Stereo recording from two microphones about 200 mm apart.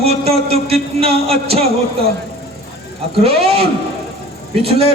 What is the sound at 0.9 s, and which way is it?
Music, 30° right (ahead or behind).